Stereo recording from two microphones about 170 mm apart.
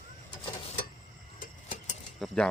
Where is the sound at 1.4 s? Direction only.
50° left (ahead or behind).